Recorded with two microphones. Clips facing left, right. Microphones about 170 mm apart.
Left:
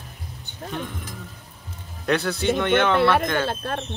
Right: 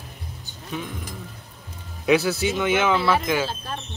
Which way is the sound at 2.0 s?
5° right (ahead or behind).